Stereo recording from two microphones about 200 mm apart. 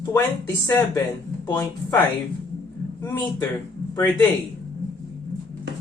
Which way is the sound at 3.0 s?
10° left (ahead or behind).